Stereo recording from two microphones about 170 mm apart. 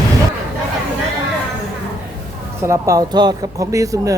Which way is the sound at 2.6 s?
20° right (ahead or behind).